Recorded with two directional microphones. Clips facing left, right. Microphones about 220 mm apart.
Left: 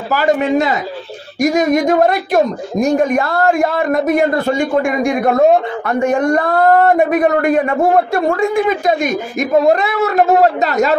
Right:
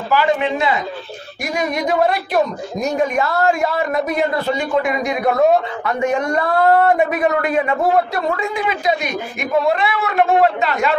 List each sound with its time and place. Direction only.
0.1 s speech: 45° left (ahead or behind)